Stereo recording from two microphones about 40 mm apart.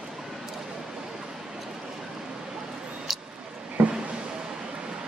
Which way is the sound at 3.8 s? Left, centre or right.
Right.